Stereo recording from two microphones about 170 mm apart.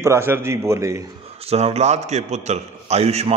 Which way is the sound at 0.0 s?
15° right (ahead or behind).